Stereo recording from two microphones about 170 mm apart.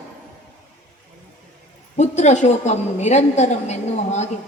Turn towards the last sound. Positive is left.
turn(degrees=40)  # may be behind; listen again after turning